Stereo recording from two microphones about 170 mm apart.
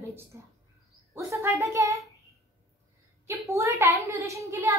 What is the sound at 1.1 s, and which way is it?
Speech, 15° right (ahead or behind).